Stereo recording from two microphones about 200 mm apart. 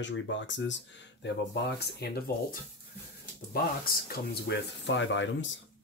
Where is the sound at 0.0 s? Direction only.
65° left (ahead or behind); by 2.3 s 50° left (ahead or behind).